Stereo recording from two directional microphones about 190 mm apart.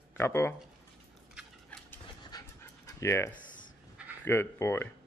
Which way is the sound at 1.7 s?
5° left (ahead or behind).